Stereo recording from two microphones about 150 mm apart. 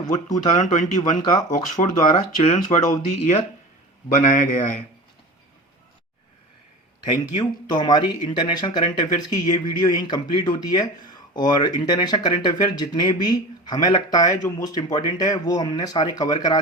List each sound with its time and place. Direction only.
0.1 s speech: 55° left (ahead or behind)
7.0 s speech: 30° left (ahead or behind)